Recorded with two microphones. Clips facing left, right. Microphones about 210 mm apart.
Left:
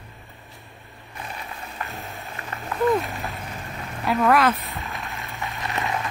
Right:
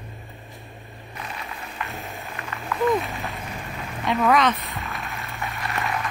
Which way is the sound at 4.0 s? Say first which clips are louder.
Left 1 dB; 5° left (ahead or behind).